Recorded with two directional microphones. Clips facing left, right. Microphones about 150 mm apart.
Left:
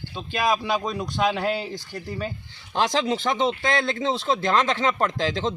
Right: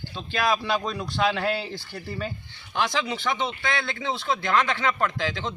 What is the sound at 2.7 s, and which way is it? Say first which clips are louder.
A man's voice: left 4 dB; 40° left (ahead or behind).